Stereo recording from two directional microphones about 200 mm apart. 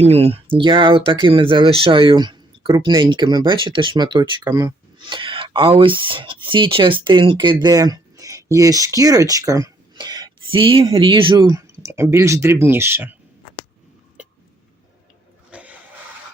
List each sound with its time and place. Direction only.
0.0 s speech: 30° right (ahead or behind); by 13.1 s 10° right (ahead or behind)
15.4 s dog: 5° right (ahead or behind)